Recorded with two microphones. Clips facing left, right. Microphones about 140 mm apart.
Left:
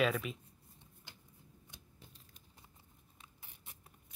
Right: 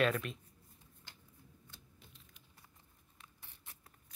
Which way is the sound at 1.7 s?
15° left (ahead or behind).